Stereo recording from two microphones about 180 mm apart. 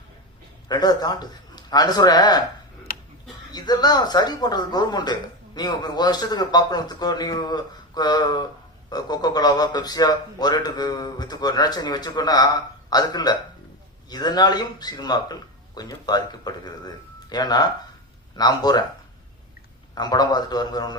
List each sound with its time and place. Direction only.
0.7 s a man's voice: 20° left (ahead or behind)
3.5 s a man's voice: 20° left (ahead or behind)
19.9 s a man's voice: 20° left (ahead or behind)